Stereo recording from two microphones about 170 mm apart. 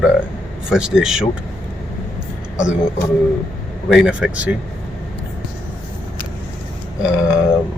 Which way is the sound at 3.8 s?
5° right (ahead or behind).